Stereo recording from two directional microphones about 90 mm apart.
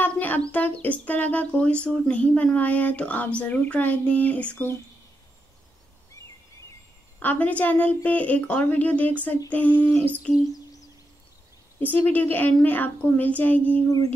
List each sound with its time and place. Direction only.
0.0 s bird: 20° left (ahead or behind)
0.5 s a woman's voice: 15° left (ahead or behind)
7.2 s a woman's voice: 20° left (ahead or behind)
11.8 s a woman's voice: 20° left (ahead or behind)